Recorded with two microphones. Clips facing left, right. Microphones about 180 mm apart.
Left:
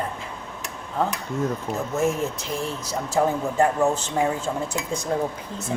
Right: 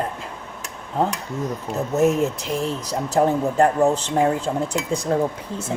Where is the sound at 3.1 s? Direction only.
35° right (ahead or behind).